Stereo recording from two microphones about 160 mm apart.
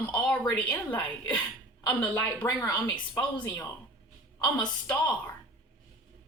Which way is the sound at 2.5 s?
20° left (ahead or behind).